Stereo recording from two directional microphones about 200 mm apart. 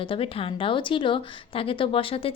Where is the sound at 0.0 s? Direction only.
25° left (ahead or behind).